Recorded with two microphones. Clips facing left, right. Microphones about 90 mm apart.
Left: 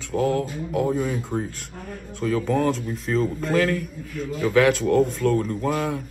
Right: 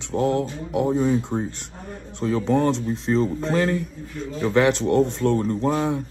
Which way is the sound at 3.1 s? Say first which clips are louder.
Right 2 dB; 25° right (ahead or behind).